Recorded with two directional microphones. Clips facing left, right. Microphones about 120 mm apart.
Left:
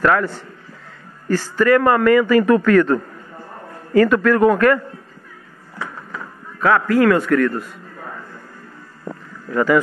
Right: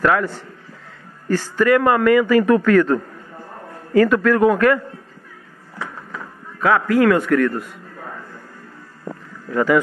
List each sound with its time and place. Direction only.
0.0 s speech: 15° right (ahead or behind)
1.3 s a man's voice: 15° right (ahead or behind)
4.0 s a man's voice: 5° right (ahead or behind)
6.6 s speech: 15° right (ahead or behind)
9.5 s speech: 15° right (ahead or behind)